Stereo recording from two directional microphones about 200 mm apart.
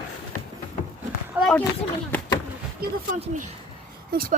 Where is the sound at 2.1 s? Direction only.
10° left (ahead or behind).